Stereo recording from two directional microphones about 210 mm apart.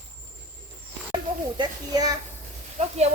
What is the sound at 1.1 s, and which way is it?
A child's voice, 20° right (ahead or behind).